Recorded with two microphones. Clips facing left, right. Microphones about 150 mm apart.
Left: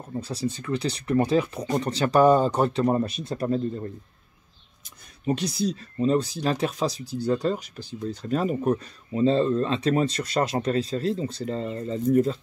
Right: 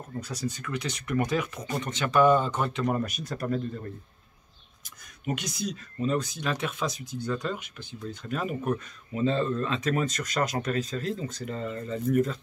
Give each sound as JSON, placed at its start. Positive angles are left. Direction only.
{"t": 0.2, "sound": "speech", "side_deg": 30}